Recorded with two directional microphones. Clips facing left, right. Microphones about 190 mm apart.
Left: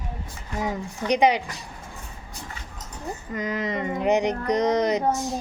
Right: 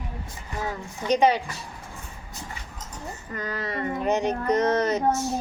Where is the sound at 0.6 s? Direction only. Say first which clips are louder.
Left 3 dB; 15° left (ahead or behind).